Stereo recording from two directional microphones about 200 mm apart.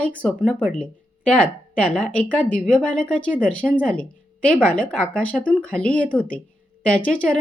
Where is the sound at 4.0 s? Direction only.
5° left (ahead or behind).